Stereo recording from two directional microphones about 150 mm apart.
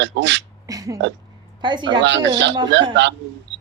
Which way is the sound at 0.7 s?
25° right (ahead or behind).